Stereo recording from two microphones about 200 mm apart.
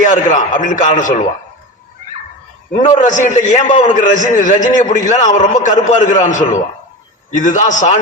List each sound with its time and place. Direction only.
0.0 s a man's voice: 40° left (ahead or behind)
2.7 s a man's voice: 40° left (ahead or behind)